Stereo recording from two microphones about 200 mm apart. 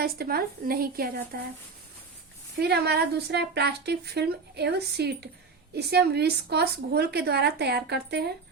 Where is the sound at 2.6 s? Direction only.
55° right (ahead or behind).